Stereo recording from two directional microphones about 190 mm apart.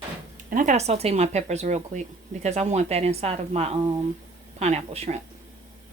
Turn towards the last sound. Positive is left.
turn(degrees=-35)  # may be behind; listen again after turning